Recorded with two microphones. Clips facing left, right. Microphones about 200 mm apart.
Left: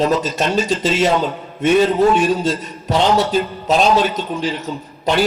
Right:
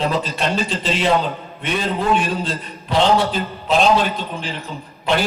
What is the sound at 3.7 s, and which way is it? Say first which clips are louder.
Speech: even; 40° left (ahead or behind).